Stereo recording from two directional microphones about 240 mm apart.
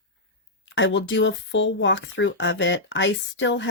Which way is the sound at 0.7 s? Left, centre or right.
Left.